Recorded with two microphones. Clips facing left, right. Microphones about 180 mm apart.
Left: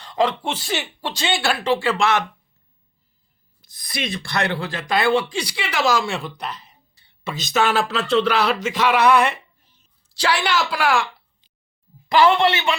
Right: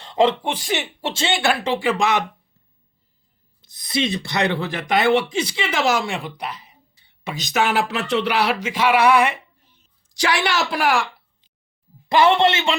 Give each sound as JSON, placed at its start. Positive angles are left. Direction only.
{"t": 0.0, "sound": "a sound", "side_deg": -25}
{"t": 0.4, "sound": "speech", "side_deg": -15}
{"t": 3.6, "sound": "a woman's voice", "side_deg": -25}
{"t": 12.0, "sound": "a woman's voice", "side_deg": -25}